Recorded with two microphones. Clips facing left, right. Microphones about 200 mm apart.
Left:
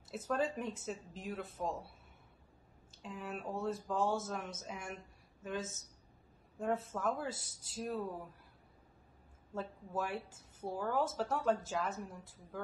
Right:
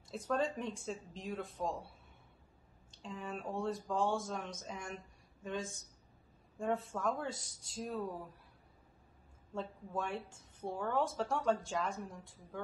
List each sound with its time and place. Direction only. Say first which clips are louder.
0.1 s a woman's voice: even; 5° left (ahead or behind)
2.9 s a woman's voice: even; 5° left (ahead or behind)
7.2 s speech: even; 25° right (ahead or behind)
7.7 s a woman's voice: left 1 dB; centre (ahead or behind)
9.5 s a woman's voice: even; 5° left (ahead or behind)